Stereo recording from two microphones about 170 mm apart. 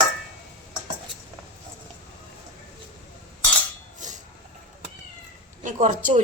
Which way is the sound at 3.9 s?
45° right (ahead or behind).